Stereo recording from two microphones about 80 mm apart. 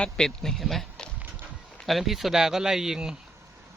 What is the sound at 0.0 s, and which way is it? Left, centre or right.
Speech, centre.